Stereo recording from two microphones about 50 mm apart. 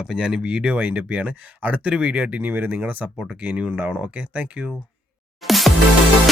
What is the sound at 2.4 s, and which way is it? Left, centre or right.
Speech, right.